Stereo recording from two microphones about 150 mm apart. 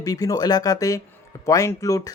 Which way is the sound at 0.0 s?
25° left (ahead or behind).